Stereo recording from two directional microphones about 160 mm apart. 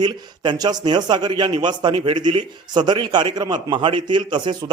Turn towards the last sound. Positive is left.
turn(degrees=-30)  # may be behind; listen again after turning